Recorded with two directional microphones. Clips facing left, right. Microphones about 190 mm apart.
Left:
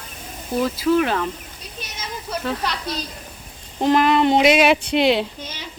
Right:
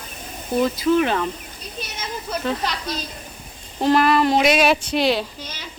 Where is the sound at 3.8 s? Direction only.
15° left (ahead or behind).